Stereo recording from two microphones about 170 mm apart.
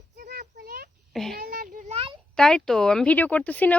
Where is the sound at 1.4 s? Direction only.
55° right (ahead or behind); by 2.2 s 35° right (ahead or behind).